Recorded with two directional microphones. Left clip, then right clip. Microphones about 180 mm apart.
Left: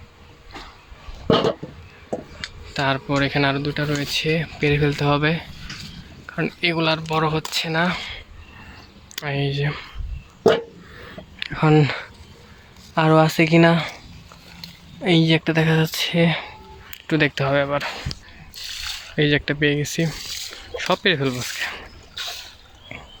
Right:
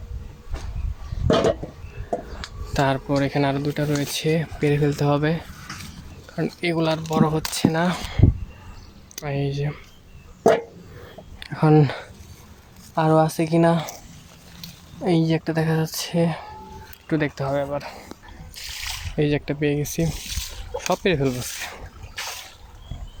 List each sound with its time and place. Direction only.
1.3 s a sound: 35° left (ahead or behind)
2.7 s speech: 15° right (ahead or behind)
9.1 s speech: 5° right (ahead or behind)
11.3 s a sound: 10° right (ahead or behind)
12.9 s speech: 5° left (ahead or behind)
15.0 s speech: centre (ahead or behind)
19.1 s speech: 5° right (ahead or behind)